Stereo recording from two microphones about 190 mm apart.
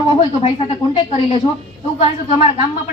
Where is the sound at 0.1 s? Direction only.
30° left (ahead or behind).